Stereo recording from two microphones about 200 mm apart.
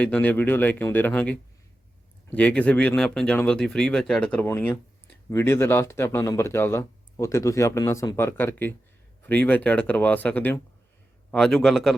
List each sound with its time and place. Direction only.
0.0 s speech: 5° left (ahead or behind)